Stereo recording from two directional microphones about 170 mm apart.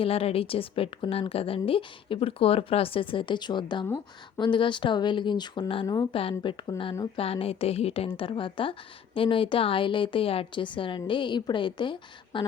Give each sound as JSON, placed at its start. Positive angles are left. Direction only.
{"t": 0.0, "sound": "a woman's voice", "side_deg": 35}